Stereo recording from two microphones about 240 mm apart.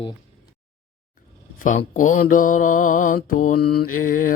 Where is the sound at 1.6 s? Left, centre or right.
Left.